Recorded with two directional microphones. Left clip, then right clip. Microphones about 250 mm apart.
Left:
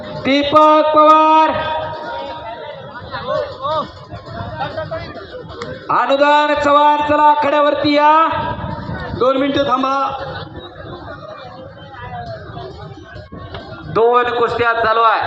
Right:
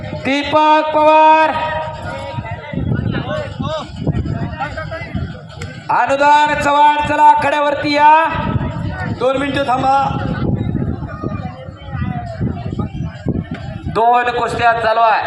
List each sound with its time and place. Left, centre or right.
0.2 s a man's voice: right
3.3 s a sound: right
5.9 s a man's voice: right
13.9 s a man's voice: right